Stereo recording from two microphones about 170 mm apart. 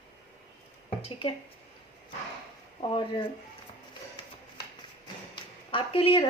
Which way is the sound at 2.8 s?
30° left (ahead or behind).